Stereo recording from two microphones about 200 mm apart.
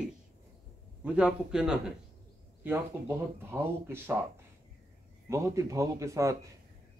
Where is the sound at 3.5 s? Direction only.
10° right (ahead or behind).